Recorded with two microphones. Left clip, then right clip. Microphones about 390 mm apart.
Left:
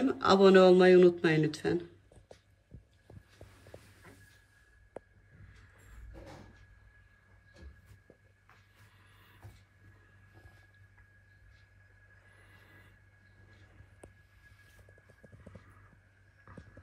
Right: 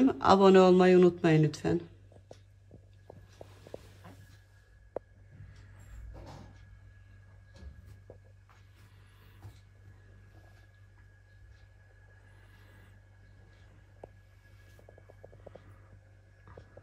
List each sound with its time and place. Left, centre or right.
0.0 s a man's voice: centre